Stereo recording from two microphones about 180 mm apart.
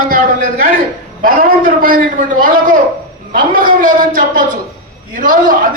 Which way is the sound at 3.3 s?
50° right (ahead or behind).